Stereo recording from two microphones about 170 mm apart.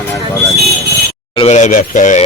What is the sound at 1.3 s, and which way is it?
Speech, 40° left (ahead or behind).